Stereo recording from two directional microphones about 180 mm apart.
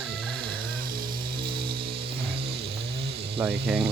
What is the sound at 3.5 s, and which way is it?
Speech, 60° right (ahead or behind).